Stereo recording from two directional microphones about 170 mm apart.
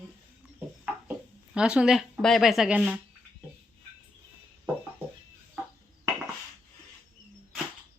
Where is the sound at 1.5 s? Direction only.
5° right (ahead or behind).